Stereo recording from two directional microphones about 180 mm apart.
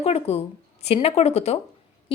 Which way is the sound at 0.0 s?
35° left (ahead or behind).